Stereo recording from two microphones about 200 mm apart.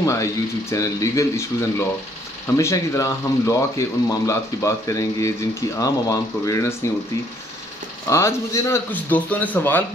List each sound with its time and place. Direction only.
0.0 s speech: 15° left (ahead or behind)
8.1 s speech: 15° left (ahead or behind)